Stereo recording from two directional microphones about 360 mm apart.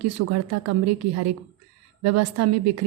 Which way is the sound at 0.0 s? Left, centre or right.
Right.